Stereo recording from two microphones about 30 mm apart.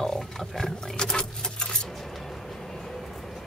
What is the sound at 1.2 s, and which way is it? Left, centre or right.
Keys jangling, left.